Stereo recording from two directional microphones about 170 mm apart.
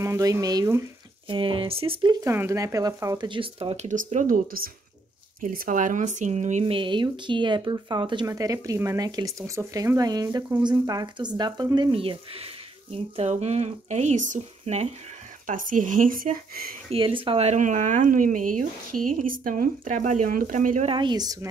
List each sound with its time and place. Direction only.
0.0 s speech: 20° right (ahead or behind)
1.3 s speech: 30° right (ahead or behind)
6.6 s speech: 30° right (ahead or behind); by 16.7 s 55° right (ahead or behind)
16.9 s speech: 30° right (ahead or behind); by 20.9 s 50° right (ahead or behind)
20.9 s speech: 25° right (ahead or behind)